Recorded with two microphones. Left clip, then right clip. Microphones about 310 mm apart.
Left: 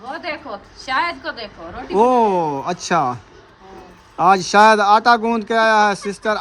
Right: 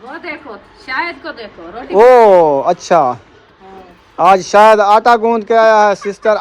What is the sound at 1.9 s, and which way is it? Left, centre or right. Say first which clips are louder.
Speech: right 9 dB; centre.